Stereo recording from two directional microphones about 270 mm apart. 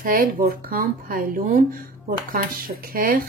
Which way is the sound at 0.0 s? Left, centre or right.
Right.